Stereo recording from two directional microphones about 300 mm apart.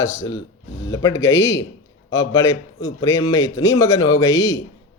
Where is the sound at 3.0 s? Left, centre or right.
Centre.